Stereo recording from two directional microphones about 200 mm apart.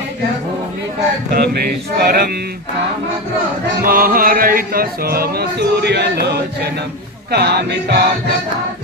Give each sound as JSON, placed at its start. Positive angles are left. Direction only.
{"t": 1.3, "sound": "chant", "side_deg": -50}
{"t": 3.8, "sound": "chant", "side_deg": -45}